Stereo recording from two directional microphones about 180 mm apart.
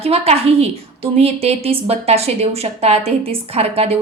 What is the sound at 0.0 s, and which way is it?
Speech, 35° right (ahead or behind).